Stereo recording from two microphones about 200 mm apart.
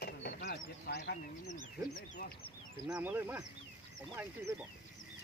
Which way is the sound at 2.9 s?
5° right (ahead or behind).